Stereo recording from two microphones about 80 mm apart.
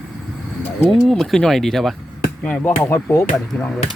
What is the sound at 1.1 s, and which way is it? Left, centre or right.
Speech, centre.